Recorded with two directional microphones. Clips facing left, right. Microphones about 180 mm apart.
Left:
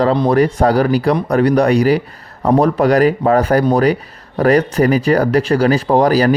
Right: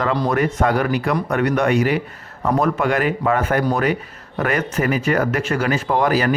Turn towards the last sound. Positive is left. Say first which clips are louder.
# left 6 dB
turn(degrees=35)  # may be behind; listen again after turning